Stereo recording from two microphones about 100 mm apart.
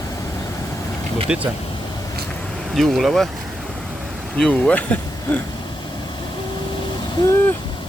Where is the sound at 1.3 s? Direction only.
10° right (ahead or behind).